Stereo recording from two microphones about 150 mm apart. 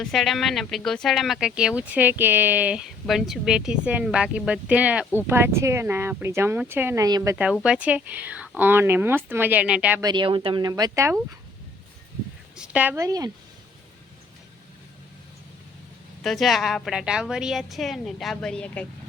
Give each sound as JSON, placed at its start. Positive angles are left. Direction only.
{"t": 0.0, "sound": "a woman's voice", "side_deg": 0}
{"t": 7.3, "sound": "speech", "side_deg": -5}
{"t": 10.0, "sound": "speech", "side_deg": -30}
{"t": 12.5, "sound": "a woman's voice", "side_deg": -5}
{"t": 13.0, "sound": "speech", "side_deg": -25}
{"t": 16.2, "sound": "a woman's voice", "side_deg": 0}